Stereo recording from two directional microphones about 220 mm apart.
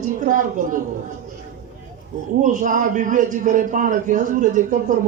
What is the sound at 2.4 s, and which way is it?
A man's voice, 35° right (ahead or behind).